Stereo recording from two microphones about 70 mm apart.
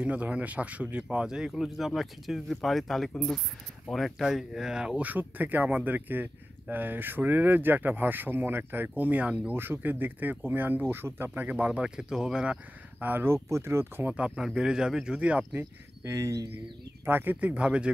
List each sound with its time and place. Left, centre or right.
0.0 s speech: centre
1.1 s speech: centre
5.0 s speech: right
9.5 s speech: right
11.2 s speech: right
13.0 s speech: right
14.0 s speech: centre
16.0 s speech: right
17.0 s speech: right